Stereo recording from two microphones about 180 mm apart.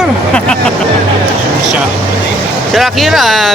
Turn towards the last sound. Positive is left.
turn(degrees=0)  # may be behind; listen again after turning